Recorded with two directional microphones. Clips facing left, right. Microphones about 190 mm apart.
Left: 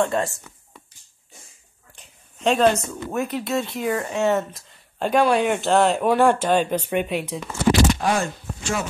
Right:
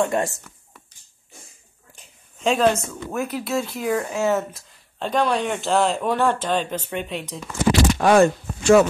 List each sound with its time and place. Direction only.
0.0 s speech: 20° right (ahead or behind)
2.0 s speech: centre (ahead or behind)
8.0 s speech: 70° right (ahead or behind)